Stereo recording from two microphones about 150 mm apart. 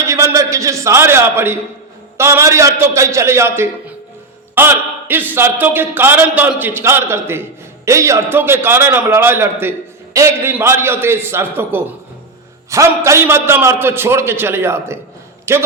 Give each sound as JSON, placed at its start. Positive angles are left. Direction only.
{"t": 0.0, "sound": "a man's voice", "side_deg": -20}